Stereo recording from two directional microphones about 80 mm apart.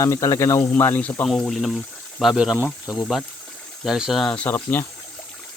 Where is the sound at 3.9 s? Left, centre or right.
Centre.